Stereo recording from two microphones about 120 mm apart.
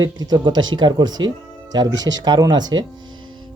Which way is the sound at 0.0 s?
35° right (ahead or behind).